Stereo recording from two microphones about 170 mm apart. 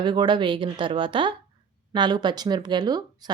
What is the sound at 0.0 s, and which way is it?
Speech, 25° right (ahead or behind).